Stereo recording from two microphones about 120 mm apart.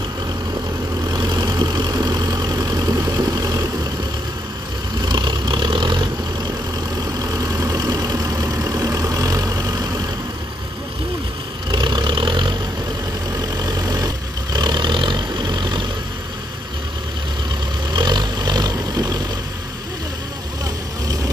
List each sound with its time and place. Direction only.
1.0 s vehicle: 35° right (ahead or behind)
5.0 s vehicle: 35° right (ahead or behind)
11.7 s vehicle: 40° right (ahead or behind)
13.6 s vehicle: 35° right (ahead or behind)
17.9 s vehicle: 35° right (ahead or behind)